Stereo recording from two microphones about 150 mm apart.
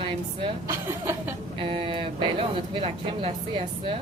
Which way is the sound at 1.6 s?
35° right (ahead or behind).